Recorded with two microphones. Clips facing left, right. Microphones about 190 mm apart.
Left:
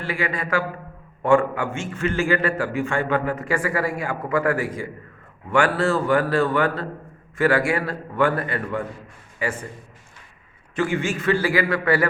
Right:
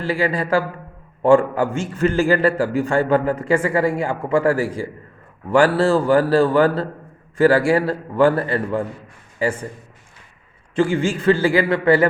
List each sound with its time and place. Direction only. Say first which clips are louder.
0.0 s a man's voice: right 6 dB; 30° right (ahead or behind)
10.8 s a man's voice: right 5 dB; 30° right (ahead or behind)